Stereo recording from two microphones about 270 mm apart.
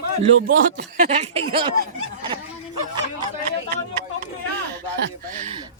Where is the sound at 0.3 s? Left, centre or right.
Right.